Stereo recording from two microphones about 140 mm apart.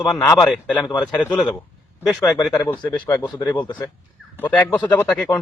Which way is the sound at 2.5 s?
15° left (ahead or behind).